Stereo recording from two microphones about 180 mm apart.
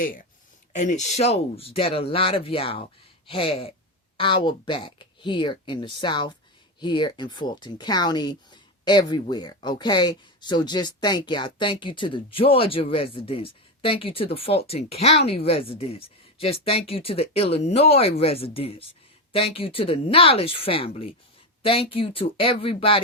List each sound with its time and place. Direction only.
0.8 s speech: 40° left (ahead or behind)